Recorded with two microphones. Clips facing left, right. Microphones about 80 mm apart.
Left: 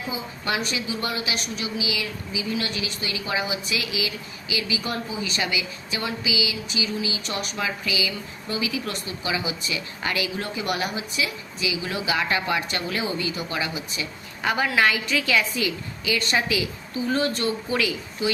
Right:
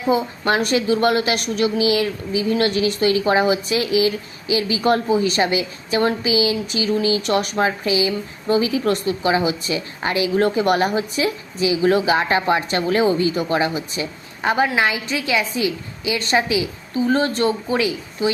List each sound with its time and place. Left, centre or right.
0.1 s a woman's voice: right
10.3 s a woman's voice: right